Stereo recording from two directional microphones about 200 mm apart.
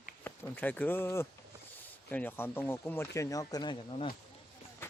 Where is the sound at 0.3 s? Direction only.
10° left (ahead or behind).